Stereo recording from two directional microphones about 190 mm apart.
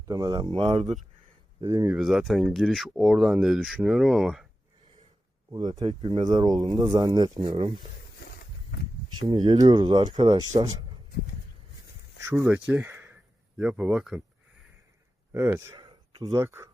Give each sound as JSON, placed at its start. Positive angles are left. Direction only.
{"t": 0.1, "sound": "speech", "side_deg": -20}
{"t": 1.6, "sound": "speech", "side_deg": -15}
{"t": 2.0, "sound": "speech", "side_deg": 0}
{"t": 5.5, "sound": "speech", "side_deg": -20}
{"t": 9.0, "sound": "speech", "side_deg": -25}
{"t": 12.3, "sound": "speech", "side_deg": -10}
{"t": 15.3, "sound": "speech", "side_deg": -15}